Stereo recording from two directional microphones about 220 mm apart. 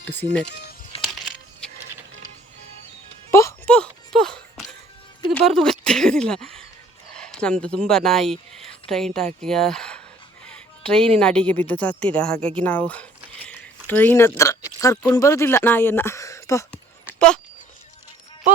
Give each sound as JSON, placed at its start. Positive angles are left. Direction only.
{"t": 0.9, "sound": "music", "side_deg": 25}
{"t": 3.3, "sound": "a sound", "side_deg": 10}
{"t": 5.5, "sound": "a woman's voice", "side_deg": 0}